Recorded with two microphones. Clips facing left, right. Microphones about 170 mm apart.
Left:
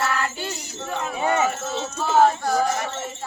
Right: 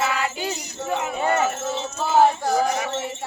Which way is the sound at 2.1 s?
10° right (ahead or behind).